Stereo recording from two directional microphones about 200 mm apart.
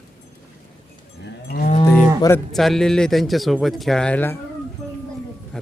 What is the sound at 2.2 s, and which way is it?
Speech, 15° left (ahead or behind).